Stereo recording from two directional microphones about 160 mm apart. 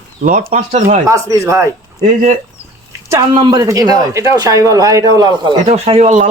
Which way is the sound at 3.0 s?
25° right (ahead or behind).